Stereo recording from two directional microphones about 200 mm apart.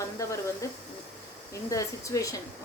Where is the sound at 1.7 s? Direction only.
15° left (ahead or behind).